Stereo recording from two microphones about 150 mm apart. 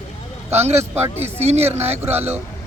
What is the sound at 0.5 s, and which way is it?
Speech, 45° right (ahead or behind).